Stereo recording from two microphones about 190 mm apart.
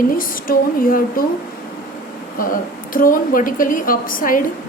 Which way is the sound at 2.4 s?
45° left (ahead or behind).